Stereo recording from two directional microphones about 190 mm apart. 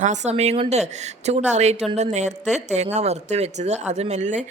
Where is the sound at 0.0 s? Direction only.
40° right (ahead or behind).